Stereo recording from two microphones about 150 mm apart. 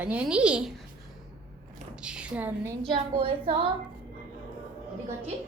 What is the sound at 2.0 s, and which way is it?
Speech, 5° right (ahead or behind).